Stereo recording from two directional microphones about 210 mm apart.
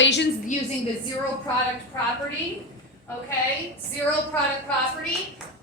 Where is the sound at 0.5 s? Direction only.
35° left (ahead or behind).